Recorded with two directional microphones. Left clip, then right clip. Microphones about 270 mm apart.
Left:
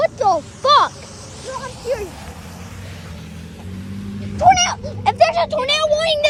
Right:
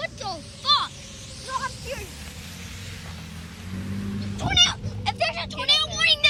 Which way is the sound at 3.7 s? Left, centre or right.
Centre.